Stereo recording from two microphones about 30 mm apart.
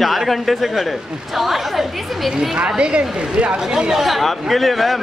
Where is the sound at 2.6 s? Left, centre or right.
Right.